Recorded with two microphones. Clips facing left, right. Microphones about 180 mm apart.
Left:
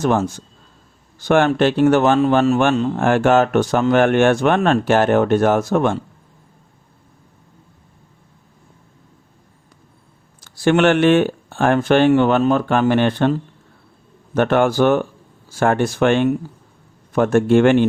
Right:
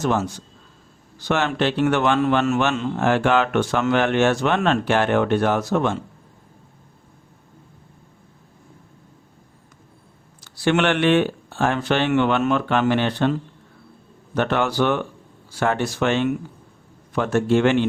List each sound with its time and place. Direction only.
0.0 s speech: 50° left (ahead or behind); by 2.6 s 35° left (ahead or behind)
2.6 s speech: 45° left (ahead or behind)
10.4 s speech: 45° left (ahead or behind)
12.1 s speech: 35° left (ahead or behind)